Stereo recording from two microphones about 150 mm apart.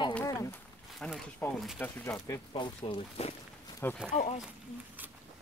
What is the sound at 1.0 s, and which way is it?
Speech, 5° left (ahead or behind).